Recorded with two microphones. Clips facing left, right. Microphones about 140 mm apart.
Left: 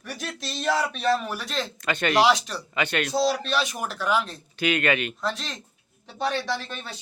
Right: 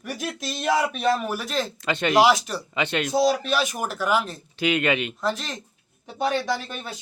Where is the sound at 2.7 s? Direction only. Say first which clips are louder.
Right 2 dB; 20° right (ahead or behind).